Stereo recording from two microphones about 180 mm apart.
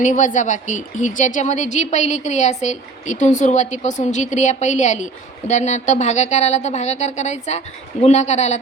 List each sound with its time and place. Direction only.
0.0 s speech: 45° left (ahead or behind)